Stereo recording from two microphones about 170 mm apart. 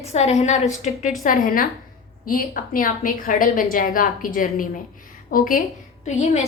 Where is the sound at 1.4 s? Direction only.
55° left (ahead or behind).